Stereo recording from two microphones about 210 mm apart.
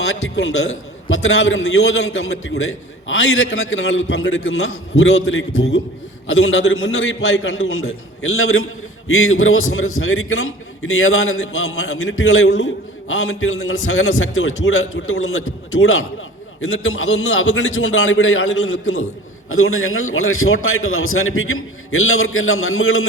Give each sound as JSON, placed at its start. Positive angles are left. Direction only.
{"t": 1.0, "sound": "a man's voice", "side_deg": 70}